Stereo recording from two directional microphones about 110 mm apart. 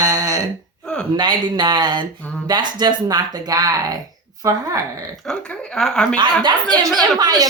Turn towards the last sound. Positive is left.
turn(degrees=-35)  # may be behind; listen again after turning